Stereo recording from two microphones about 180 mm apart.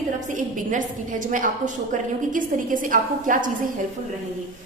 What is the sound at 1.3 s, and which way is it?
A woman's voice, 45° right (ahead or behind).